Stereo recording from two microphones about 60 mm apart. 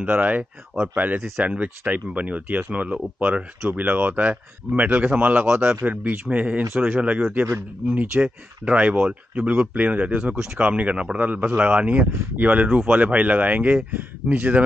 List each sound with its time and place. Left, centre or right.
0.0 s speech: right